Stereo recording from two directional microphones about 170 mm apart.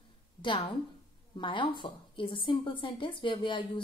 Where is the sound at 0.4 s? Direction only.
30° left (ahead or behind).